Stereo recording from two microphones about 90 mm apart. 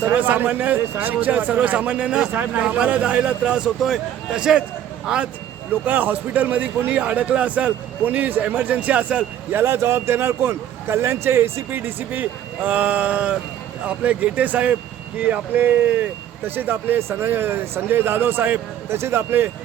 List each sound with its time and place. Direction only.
0.0 s speech: 20° right (ahead or behind)